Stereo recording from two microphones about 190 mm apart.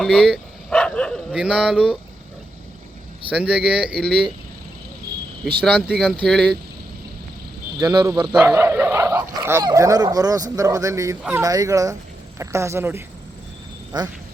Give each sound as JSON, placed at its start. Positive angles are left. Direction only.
{"t": 0.0, "sound": "dog", "side_deg": 0}
{"t": 3.2, "sound": "speech", "side_deg": -5}
{"t": 6.0, "sound": "speech", "side_deg": 0}
{"t": 7.8, "sound": "speech", "side_deg": -20}
{"t": 11.4, "sound": "speech", "side_deg": -20}